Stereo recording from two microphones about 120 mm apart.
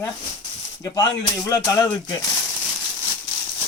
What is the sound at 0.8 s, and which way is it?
Speech, 30° left (ahead or behind).